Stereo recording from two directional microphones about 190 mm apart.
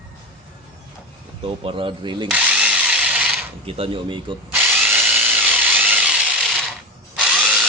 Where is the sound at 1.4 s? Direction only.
30° right (ahead or behind).